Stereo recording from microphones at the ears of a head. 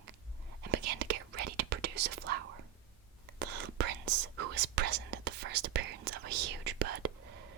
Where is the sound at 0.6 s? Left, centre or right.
Right.